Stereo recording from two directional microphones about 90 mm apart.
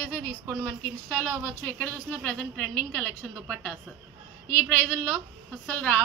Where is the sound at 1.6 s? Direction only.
20° left (ahead or behind).